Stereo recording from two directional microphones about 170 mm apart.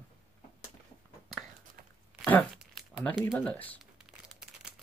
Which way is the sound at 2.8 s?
Centre (ahead or behind).